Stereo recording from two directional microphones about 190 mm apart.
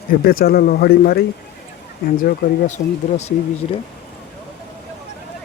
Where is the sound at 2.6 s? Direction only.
35° left (ahead or behind).